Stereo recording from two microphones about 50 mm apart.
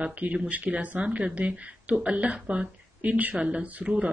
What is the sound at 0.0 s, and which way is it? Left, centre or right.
Speech, right.